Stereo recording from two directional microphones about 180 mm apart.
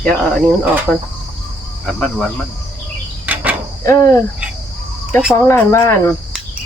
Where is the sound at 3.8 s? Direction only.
15° left (ahead or behind).